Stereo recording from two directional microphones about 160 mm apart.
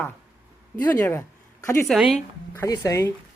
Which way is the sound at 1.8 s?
Centre (ahead or behind).